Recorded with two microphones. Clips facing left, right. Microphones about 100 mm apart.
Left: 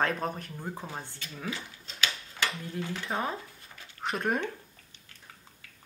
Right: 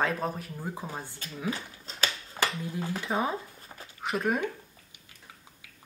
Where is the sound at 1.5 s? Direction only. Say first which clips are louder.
Right 4 dB; 40° right (ahead or behind).